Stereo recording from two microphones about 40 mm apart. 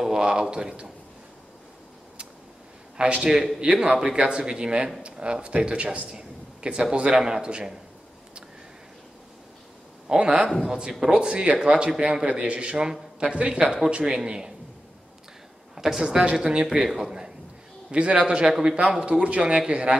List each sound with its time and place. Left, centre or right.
0.0 s speech: centre
3.0 s a man's voice: right
10.0 s a man's voice: right
15.7 s a sound: centre
16.0 s a man's voice: centre
17.9 s speech: right
18.4 s a man's voice: centre
18.9 s speech: right